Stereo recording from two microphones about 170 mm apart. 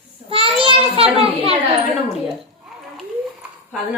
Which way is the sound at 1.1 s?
35° right (ahead or behind).